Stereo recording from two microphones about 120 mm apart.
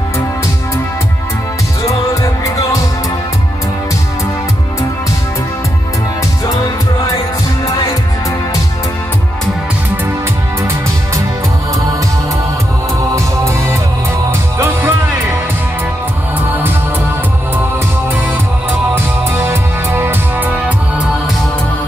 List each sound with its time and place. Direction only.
13.1 s music: 25° right (ahead or behind)
18.9 s music: 20° right (ahead or behind)